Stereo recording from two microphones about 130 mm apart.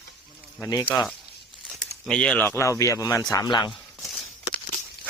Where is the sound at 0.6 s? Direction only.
30° left (ahead or behind).